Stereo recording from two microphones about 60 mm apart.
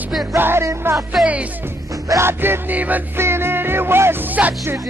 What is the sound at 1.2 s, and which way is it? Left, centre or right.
Speech, centre.